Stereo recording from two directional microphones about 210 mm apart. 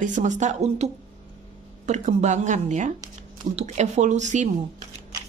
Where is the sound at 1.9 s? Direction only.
35° right (ahead or behind).